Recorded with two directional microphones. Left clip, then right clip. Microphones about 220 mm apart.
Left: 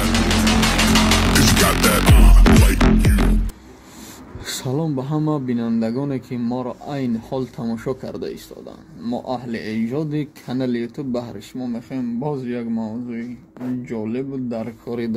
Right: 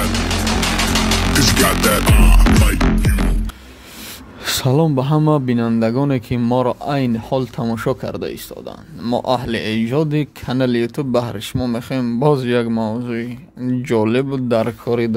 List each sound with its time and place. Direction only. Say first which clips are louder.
0.0 s music: left 1 dB; centre (ahead or behind)
4.5 s speech: right 8 dB; 30° right (ahead or behind)